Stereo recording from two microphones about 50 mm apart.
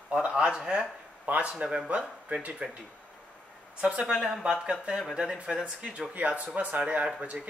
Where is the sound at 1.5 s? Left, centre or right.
Centre.